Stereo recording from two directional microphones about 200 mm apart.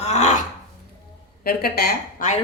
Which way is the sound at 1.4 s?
50° left (ahead or behind).